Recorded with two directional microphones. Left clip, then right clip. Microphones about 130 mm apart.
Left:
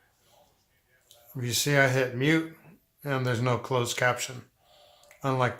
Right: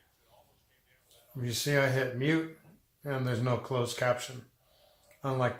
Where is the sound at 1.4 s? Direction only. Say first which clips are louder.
Left 5 dB; 60° left (ahead or behind).